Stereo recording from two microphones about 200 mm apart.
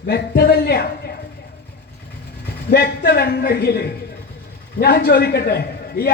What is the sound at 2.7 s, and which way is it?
A man's voice, 50° left (ahead or behind).